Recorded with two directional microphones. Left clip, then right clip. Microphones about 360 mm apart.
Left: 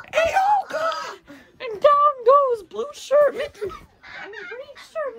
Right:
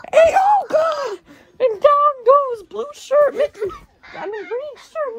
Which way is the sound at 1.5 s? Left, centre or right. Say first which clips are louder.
Right 3 dB; centre.